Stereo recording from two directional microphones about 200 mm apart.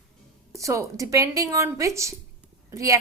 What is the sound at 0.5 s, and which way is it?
A woman's voice, 15° right (ahead or behind).